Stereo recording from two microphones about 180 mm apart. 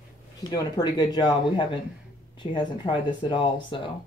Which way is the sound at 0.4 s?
20° left (ahead or behind).